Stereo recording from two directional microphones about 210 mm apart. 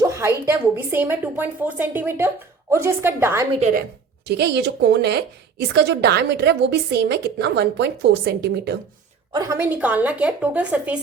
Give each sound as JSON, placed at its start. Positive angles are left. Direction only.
{"t": 0.0, "sound": "a woman's voice", "side_deg": -15}
{"t": 3.5, "sound": "a woman's voice", "side_deg": -35}
{"t": 4.3, "sound": "a woman's voice", "side_deg": -50}
{"t": 9.3, "sound": "a woman's voice", "side_deg": -15}